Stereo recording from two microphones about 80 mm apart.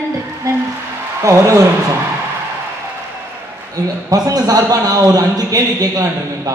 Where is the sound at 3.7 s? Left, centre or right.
Right.